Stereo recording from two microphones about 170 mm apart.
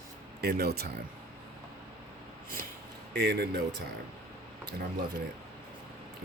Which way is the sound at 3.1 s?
70° right (ahead or behind).